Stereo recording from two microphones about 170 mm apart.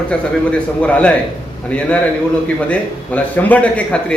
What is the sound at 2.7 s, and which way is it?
A man's voice, 10° left (ahead or behind).